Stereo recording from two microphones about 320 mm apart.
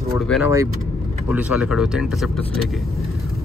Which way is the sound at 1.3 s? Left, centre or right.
Centre.